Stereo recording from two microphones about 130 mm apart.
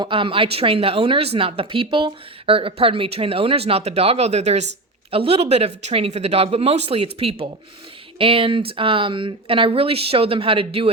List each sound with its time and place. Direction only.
0.0 s speech: 40° right (ahead or behind)